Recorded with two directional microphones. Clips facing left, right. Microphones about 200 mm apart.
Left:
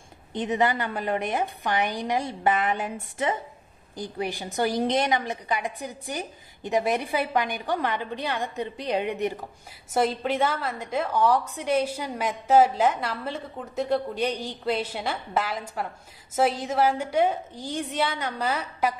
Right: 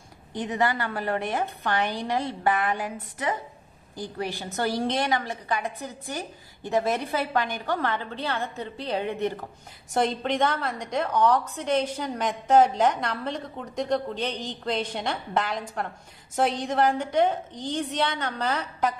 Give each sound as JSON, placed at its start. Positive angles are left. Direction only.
{"t": 0.3, "sound": "a woman's voice", "side_deg": 20}